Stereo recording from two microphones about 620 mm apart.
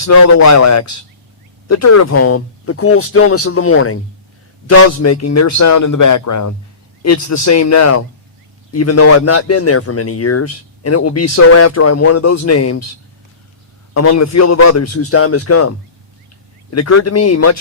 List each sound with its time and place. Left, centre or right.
0.0 s a man's voice: left
13.9 s a man's voice: left
16.7 s a man's voice: left